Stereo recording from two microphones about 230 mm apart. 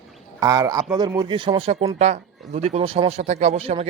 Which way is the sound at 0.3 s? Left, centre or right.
Centre.